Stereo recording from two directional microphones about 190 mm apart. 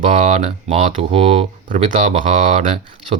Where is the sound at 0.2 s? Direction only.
35° right (ahead or behind).